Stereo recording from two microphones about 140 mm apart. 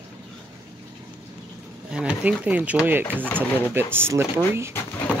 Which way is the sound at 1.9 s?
5° right (ahead or behind).